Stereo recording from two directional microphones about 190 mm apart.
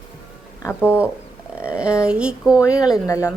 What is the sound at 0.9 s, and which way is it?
A woman's voice, 5° right (ahead or behind).